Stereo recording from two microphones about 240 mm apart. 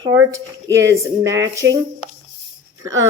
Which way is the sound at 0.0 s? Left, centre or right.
Centre.